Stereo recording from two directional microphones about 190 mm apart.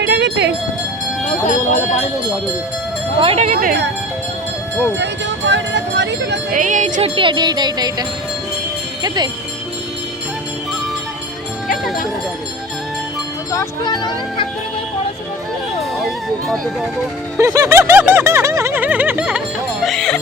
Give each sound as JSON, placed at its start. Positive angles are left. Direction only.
{"t": 0.0, "sound": "music", "side_deg": -60}
{"t": 1.5, "sound": "speech", "side_deg": 40}
{"t": 3.2, "sound": "speech", "side_deg": -30}
{"t": 3.6, "sound": "speech", "side_deg": -50}
{"t": 4.9, "sound": "speech", "side_deg": -70}
{"t": 6.5, "sound": "music", "side_deg": -45}
{"t": 9.0, "sound": "music", "side_deg": -20}
{"t": 13.5, "sound": "speech", "side_deg": 20}
{"t": 15.8, "sound": "music", "side_deg": 0}
{"t": 17.3, "sound": "a sound", "side_deg": -15}
{"t": 19.8, "sound": "music", "side_deg": 0}